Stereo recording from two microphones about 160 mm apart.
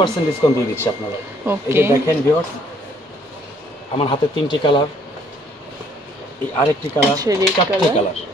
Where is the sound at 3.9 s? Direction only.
30° left (ahead or behind).